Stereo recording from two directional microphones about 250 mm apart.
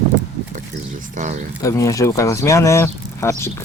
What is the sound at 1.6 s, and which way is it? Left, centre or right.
Speech, centre.